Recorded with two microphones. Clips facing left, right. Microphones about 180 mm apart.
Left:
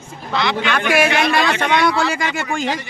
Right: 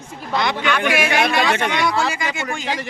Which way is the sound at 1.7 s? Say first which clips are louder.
Left 3 dB; 60° left (ahead or behind).